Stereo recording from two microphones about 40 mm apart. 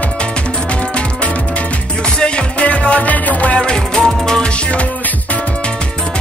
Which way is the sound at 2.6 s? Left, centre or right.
Left.